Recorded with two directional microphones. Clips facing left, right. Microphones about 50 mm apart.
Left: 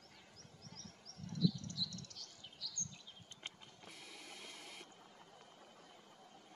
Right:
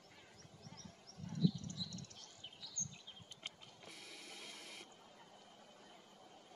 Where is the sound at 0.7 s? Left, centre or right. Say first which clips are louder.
Left 1 dB; right.